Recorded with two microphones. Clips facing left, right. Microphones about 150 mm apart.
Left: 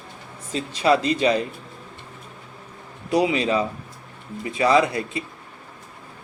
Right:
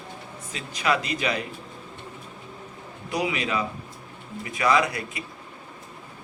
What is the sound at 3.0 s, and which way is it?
A man's voice, 30° left (ahead or behind).